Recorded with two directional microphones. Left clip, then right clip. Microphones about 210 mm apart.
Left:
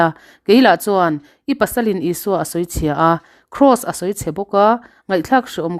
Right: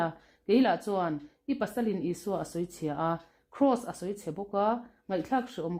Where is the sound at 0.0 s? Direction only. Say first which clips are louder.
Left 16 dB; 45° left (ahead or behind).